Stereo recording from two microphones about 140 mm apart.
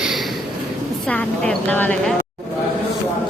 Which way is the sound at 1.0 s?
10° left (ahead or behind).